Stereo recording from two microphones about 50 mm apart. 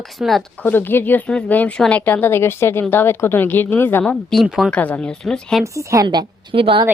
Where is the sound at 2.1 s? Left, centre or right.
Left.